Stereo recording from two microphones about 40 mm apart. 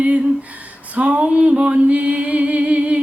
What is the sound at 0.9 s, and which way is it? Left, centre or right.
Music, right.